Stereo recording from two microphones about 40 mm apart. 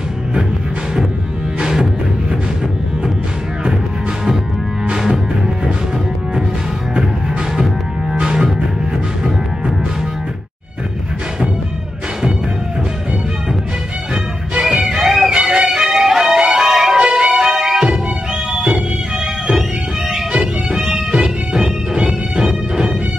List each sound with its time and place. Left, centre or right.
1.6 s music: centre
4.9 s music: centre
7.5 s music: centre
14.6 s music: centre
16.9 s music: right
20.1 s music: centre